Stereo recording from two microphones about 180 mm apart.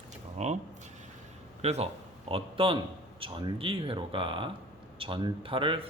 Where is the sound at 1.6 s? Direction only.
35° right (ahead or behind).